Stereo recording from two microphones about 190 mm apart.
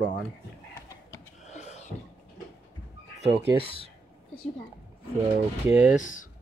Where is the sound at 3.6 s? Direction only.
30° left (ahead or behind).